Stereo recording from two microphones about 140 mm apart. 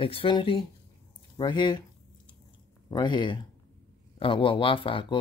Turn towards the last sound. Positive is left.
turn(degrees=40)  # may be behind; listen again after turning